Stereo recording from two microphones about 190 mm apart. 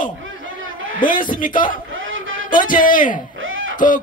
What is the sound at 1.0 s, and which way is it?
Music, 45° left (ahead or behind).